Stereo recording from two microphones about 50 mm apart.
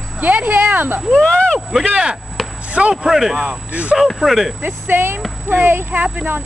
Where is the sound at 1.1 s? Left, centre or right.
Centre.